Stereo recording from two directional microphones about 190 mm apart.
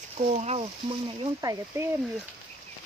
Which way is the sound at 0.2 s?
35° right (ahead or behind).